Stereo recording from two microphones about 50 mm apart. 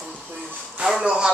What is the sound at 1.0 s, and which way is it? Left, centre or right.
Speech, centre.